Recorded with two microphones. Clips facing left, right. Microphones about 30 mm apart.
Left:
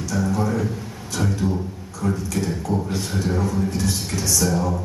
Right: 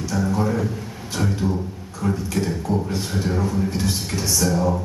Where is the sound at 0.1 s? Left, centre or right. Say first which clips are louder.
Even; centre.